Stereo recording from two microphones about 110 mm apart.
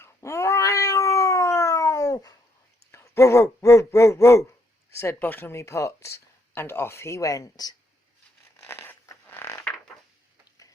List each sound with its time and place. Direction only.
0.0 s cat: 25° left (ahead or behind)
2.9 s speech: 25° left (ahead or behind)
8.6 s zipper: 20° left (ahead or behind)